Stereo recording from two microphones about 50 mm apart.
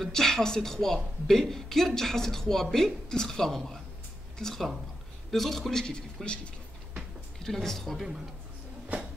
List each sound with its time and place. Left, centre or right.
0.0 s speech: centre
7.4 s speech: centre